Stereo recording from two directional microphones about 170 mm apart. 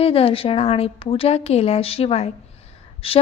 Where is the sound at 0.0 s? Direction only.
35° left (ahead or behind).